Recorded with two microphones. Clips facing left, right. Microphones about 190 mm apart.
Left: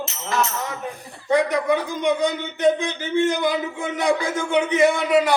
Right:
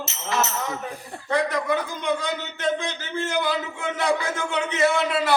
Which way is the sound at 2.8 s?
15° left (ahead or behind).